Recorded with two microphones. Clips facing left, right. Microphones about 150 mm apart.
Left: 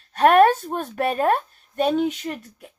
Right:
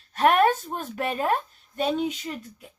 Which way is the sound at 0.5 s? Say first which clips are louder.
Left 5 dB; 60° left (ahead or behind).